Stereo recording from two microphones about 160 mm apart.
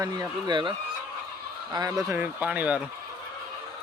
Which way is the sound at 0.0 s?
25° right (ahead or behind).